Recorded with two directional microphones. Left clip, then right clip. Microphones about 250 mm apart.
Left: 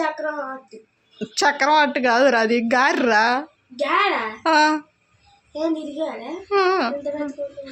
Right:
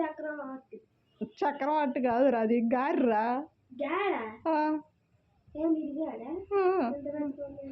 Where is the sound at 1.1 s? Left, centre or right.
Centre.